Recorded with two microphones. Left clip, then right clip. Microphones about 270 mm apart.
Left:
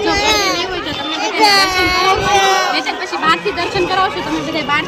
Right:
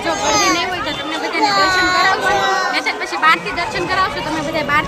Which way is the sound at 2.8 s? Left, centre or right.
Centre.